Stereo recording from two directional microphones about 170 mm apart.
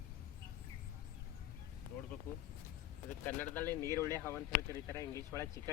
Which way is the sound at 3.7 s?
20° right (ahead or behind).